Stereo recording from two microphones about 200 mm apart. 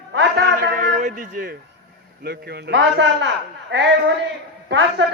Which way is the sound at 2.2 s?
55° right (ahead or behind).